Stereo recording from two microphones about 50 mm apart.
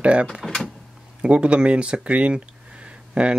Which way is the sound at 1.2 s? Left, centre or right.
Right.